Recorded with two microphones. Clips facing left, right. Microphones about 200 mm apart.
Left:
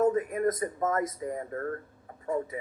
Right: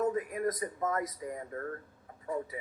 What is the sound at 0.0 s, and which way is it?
A man's voice, 50° left (ahead or behind).